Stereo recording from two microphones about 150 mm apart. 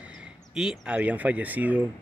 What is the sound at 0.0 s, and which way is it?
Speech, 5° right (ahead or behind).